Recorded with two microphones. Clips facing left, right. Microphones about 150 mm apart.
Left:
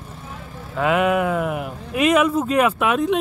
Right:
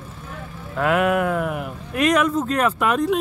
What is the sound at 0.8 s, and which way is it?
Speech, centre (ahead or behind).